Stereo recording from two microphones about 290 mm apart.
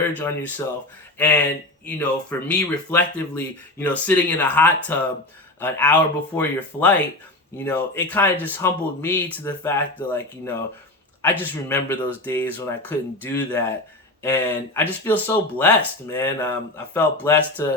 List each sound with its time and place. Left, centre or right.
0.2 s speech: centre